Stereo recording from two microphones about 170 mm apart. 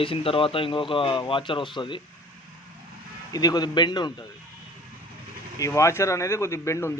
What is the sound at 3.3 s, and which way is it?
Speech, 20° left (ahead or behind).